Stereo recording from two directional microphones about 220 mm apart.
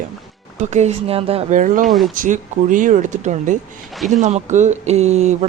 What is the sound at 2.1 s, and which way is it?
Speech, 35° right (ahead or behind).